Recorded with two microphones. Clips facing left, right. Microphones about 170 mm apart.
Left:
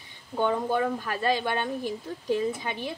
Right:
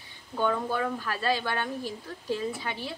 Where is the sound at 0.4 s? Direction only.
20° left (ahead or behind).